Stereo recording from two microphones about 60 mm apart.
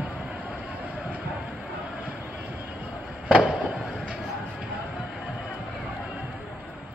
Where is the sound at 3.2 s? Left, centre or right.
Centre.